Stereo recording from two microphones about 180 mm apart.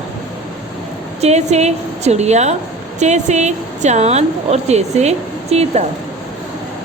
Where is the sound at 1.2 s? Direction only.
35° right (ahead or behind).